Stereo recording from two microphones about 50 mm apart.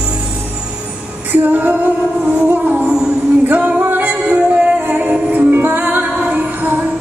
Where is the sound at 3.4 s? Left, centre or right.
Right.